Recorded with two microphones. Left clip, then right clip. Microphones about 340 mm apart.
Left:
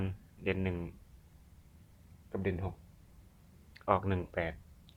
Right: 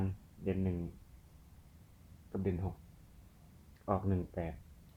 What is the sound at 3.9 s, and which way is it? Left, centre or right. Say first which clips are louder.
Speech: left 5 dB; left.